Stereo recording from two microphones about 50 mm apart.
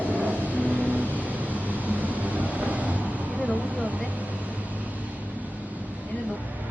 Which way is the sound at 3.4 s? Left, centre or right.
Right.